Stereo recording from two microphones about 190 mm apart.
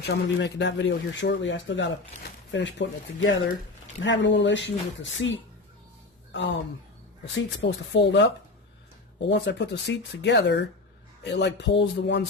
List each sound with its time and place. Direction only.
0.0 s speech: 65° left (ahead or behind); by 5.4 s 80° left
6.3 s speech: 65° left (ahead or behind)
9.3 s speech: 65° left (ahead or behind)